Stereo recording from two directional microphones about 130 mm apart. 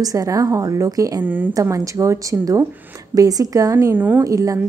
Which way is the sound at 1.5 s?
25° right (ahead or behind).